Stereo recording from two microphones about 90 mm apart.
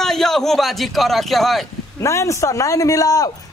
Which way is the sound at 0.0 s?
5° left (ahead or behind).